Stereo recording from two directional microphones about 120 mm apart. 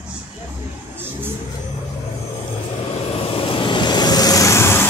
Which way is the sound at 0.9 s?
20° right (ahead or behind).